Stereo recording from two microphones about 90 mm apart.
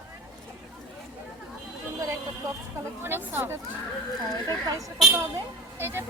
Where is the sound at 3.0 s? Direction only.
25° right (ahead or behind).